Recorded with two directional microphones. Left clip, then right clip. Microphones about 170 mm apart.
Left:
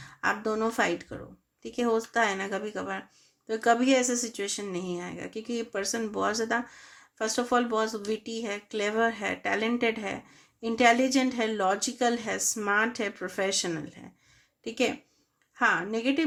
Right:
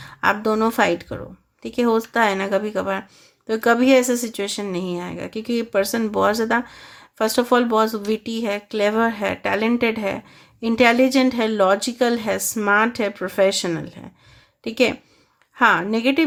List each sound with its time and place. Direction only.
0.0 s a woman's voice: 30° right (ahead or behind)